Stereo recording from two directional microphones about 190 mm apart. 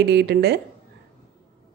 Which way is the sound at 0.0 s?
60° right (ahead or behind).